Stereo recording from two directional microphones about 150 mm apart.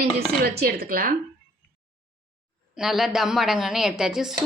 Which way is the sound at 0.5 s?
90° right.